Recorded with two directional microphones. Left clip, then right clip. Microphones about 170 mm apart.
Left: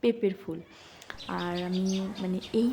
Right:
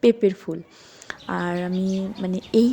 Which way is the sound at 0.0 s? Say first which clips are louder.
Right 9 dB; 40° right (ahead or behind).